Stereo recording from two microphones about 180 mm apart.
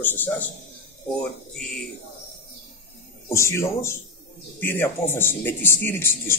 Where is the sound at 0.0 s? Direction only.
10° left (ahead or behind).